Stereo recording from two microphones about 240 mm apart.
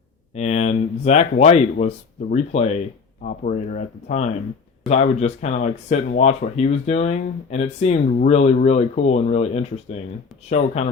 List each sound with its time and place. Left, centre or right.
0.3 s speech: left